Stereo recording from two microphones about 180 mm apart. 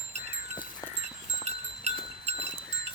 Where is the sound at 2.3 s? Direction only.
35° right (ahead or behind).